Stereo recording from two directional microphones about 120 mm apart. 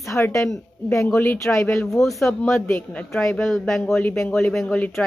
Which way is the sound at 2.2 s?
15° left (ahead or behind).